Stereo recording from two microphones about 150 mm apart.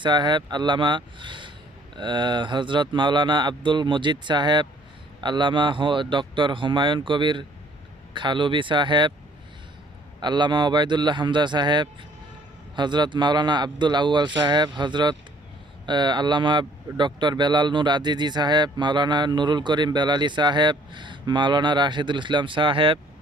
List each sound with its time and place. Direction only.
0.0 s speech: 30° right (ahead or behind)
10.2 s speech: 30° right (ahead or behind)